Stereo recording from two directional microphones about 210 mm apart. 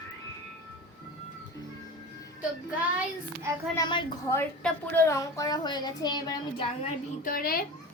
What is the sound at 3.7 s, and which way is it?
Speech, 20° left (ahead or behind).